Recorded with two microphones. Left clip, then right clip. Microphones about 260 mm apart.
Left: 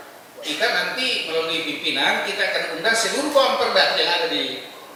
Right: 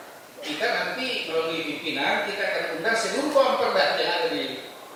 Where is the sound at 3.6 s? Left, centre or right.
Centre.